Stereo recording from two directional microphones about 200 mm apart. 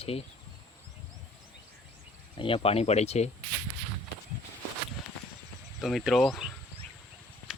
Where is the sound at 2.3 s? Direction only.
25° left (ahead or behind).